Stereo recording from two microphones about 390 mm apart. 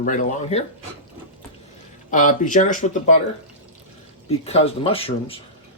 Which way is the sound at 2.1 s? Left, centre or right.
Centre.